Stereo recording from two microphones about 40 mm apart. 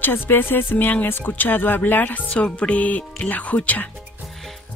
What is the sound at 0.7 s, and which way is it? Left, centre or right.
Speech, left.